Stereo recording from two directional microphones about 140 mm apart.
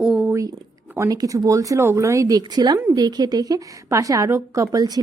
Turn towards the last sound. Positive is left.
turn(degrees=-25)  # may be behind; listen again after turning